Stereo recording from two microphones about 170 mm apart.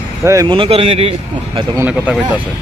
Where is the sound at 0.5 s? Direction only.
30° right (ahead or behind).